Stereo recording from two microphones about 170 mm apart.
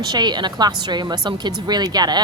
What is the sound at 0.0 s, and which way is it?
A woman's voice, 25° right (ahead or behind).